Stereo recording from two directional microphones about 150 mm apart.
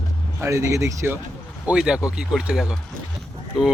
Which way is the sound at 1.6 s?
5° right (ahead or behind).